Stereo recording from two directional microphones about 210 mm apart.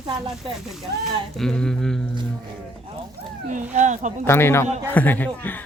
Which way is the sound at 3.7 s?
35° right (ahead or behind).